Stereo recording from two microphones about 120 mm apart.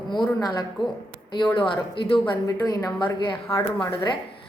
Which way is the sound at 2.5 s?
30° left (ahead or behind).